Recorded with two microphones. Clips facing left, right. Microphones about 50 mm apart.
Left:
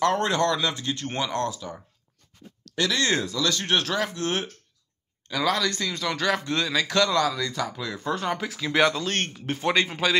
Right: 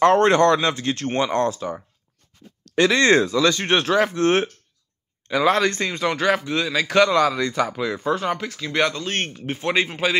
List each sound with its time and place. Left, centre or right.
0.0 s speech: right
3.3 s speech: right
6.4 s speech: centre
7.2 s speech: right
8.0 s speech: centre